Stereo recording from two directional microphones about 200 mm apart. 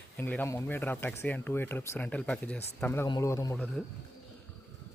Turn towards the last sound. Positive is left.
turn(degrees=10)  # may be behind; listen again after turning